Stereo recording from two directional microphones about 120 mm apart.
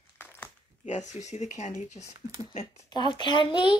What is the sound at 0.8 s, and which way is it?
Speech, 75° left (ahead or behind).